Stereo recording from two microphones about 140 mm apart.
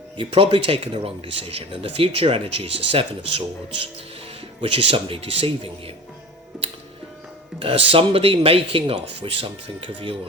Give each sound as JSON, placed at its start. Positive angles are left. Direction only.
{"t": 0.2, "sound": "speech", "side_deg": -40}
{"t": 4.6, "sound": "speech", "side_deg": -40}
{"t": 7.6, "sound": "speech", "side_deg": -40}